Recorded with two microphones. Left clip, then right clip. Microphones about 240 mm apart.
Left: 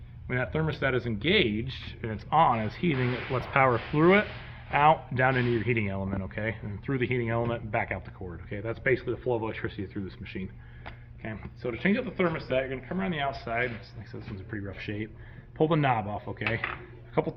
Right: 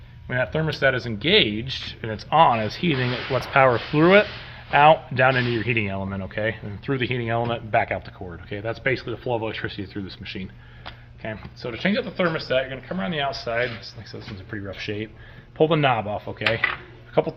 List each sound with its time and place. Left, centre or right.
0.3 s speech: right